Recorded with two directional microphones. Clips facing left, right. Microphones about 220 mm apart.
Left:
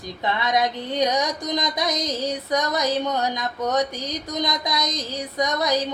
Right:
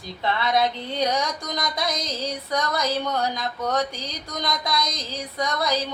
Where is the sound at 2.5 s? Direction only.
20° left (ahead or behind).